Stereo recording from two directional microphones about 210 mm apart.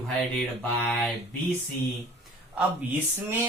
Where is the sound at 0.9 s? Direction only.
5° left (ahead or behind).